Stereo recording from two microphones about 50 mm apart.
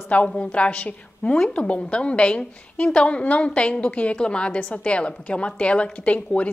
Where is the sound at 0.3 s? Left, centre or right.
Left.